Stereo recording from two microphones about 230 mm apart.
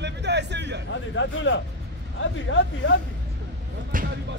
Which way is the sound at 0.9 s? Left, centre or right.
Left.